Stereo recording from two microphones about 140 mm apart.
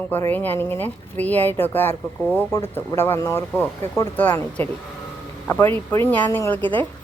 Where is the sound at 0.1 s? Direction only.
15° left (ahead or behind).